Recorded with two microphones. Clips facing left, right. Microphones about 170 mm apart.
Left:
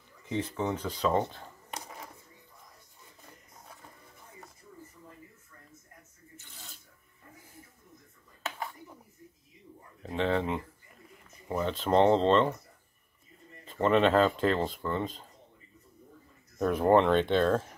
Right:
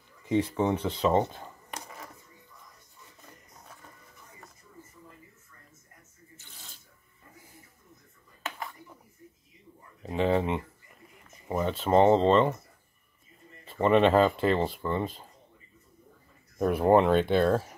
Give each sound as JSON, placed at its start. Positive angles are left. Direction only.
{"t": 0.3, "sound": "speech", "side_deg": -30}
{"t": 10.0, "sound": "a sound", "side_deg": -5}
{"t": 11.4, "sound": "speech", "side_deg": -10}
{"t": 13.7, "sound": "speech", "side_deg": -10}
{"t": 16.5, "sound": "speech", "side_deg": -10}